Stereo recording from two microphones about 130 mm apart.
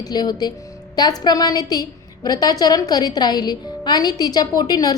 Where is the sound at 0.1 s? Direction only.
30° left (ahead or behind).